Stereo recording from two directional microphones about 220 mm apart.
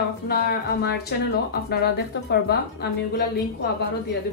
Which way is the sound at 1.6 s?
45° left (ahead or behind).